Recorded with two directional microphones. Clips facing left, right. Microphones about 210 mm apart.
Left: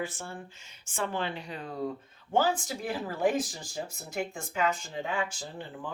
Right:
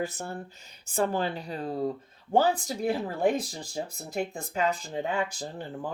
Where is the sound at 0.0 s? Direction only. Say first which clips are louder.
Right 4 dB; 40° right (ahead or behind).